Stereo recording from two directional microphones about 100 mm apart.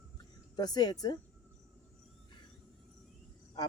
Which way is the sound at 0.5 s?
45° left (ahead or behind).